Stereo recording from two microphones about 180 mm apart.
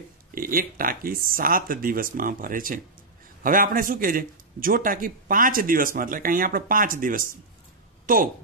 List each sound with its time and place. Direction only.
0.3 s a man's voice: 50° right (ahead or behind)